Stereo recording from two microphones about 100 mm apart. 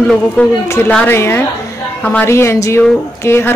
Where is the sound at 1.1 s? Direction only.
25° left (ahead or behind).